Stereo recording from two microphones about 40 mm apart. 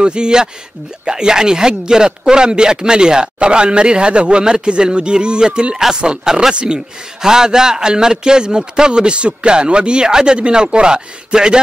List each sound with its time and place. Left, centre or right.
0.0 s speech: right
6.5 s speech: right